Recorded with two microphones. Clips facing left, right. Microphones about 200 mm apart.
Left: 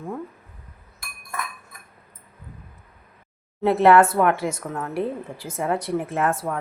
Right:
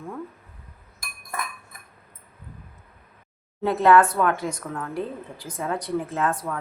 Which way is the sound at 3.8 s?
25° left (ahead or behind).